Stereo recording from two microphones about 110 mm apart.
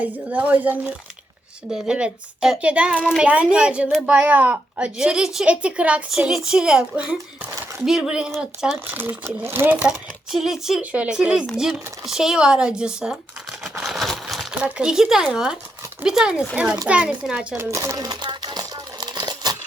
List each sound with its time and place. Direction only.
0.0 s a child's voice: 15° right (ahead or behind)
8.9 s speech: 20° right (ahead or behind)
10.3 s speech: 5° right (ahead or behind)
13.7 s a sound: centre (ahead or behind)
14.5 s a child's voice: 10° right (ahead or behind)
17.5 s crumpling: 25° right (ahead or behind); by 19.5 s 40° right (ahead or behind)